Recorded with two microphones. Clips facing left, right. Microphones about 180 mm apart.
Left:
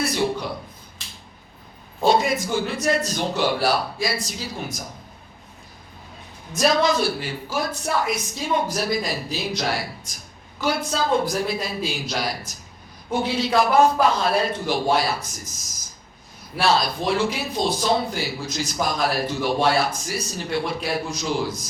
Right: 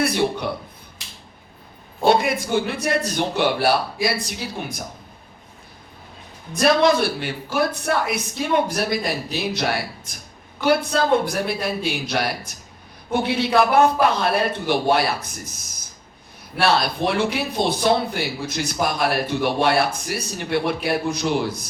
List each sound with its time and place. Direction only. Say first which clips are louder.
0.0 s speech: right 3 dB; 60° right (ahead or behind)
2.0 s speech: right 1 dB; 60° right (ahead or behind)
6.6 s speech: right 3 dB; 60° right (ahead or behind)